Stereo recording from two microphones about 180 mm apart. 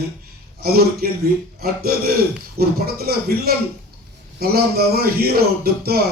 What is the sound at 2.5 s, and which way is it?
A man's voice, 60° right (ahead or behind).